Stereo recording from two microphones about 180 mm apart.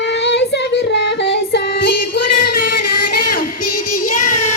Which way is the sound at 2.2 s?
70° left (ahead or behind).